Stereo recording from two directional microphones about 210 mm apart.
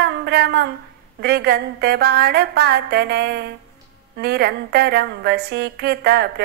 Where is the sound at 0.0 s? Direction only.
50° right (ahead or behind).